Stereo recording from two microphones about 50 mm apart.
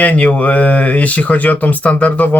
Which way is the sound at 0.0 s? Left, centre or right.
Left.